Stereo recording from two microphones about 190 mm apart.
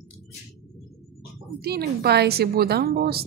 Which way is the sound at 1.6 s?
55° right (ahead or behind).